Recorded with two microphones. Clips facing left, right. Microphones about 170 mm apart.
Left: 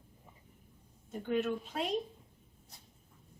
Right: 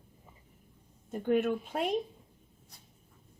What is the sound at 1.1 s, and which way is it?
Speech, 50° right (ahead or behind).